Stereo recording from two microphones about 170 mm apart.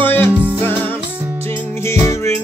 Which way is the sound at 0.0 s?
10° left (ahead or behind).